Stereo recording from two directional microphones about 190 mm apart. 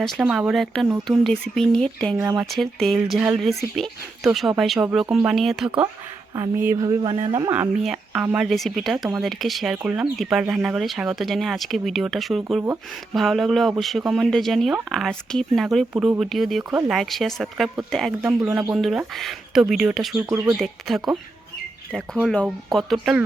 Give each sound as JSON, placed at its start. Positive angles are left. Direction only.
{"t": 0.0, "sound": "speech", "side_deg": 0}
{"t": 2.1, "sound": "speech", "side_deg": -10}
{"t": 2.5, "sound": "speech", "side_deg": 0}
{"t": 6.3, "sound": "speech", "side_deg": -15}
{"t": 7.5, "sound": "speech", "side_deg": -5}
{"t": 20.3, "sound": "speech", "side_deg": -15}
{"t": 20.6, "sound": "speech", "side_deg": 0}